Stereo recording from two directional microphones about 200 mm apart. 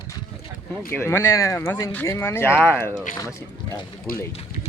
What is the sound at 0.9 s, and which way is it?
Speech, 15° left (ahead or behind).